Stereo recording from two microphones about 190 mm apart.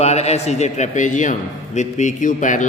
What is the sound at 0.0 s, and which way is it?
A man's voice, 35° left (ahead or behind).